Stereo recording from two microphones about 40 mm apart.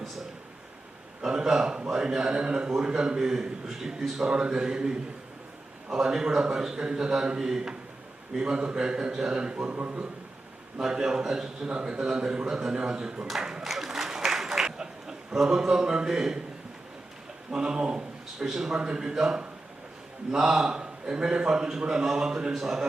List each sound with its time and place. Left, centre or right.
1.3 s a man's voice: centre
4.3 s a man's voice: right
10.8 s a man's voice: centre
13.6 s applause: centre
17.5 s speech: centre
18.4 s a man's voice: centre
18.7 s a man's voice: right